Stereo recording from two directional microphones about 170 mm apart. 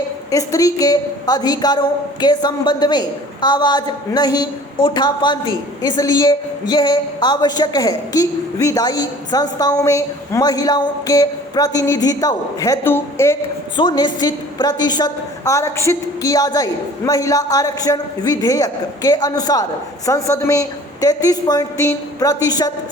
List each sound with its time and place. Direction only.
0.3 s a woman's voice: 20° left (ahead or behind)
13.7 s a woman's voice: 25° left (ahead or behind)